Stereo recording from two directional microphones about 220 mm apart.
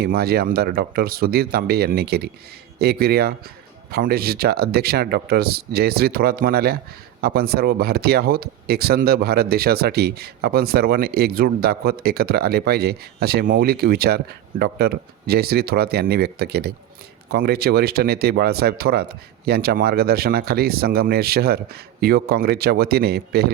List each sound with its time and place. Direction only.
0.0 s speech: 45° right (ahead or behind)